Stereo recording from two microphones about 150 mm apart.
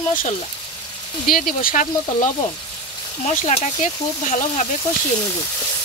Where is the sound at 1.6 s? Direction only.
55° left (ahead or behind).